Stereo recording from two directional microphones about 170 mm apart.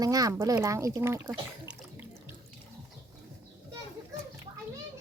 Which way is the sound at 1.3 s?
5° right (ahead or behind).